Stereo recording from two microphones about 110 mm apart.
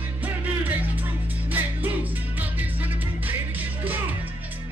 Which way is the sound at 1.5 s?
15° right (ahead or behind).